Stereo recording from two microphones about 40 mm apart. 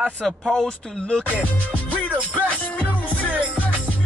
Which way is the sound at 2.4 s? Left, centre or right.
Left.